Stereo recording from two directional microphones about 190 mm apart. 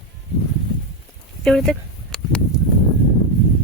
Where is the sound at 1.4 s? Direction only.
Centre (ahead or behind).